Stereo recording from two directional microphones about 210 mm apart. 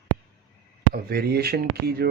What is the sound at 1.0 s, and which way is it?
Speech, 50° right (ahead or behind).